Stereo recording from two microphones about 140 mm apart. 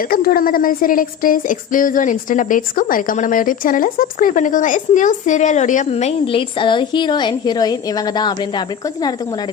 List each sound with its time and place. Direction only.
0.1 s a woman's voice: 90° left; by 5.9 s 65° left (ahead or behind)
5.9 s a woman's voice: 50° left (ahead or behind); by 9.1 s 30° left (ahead or behind)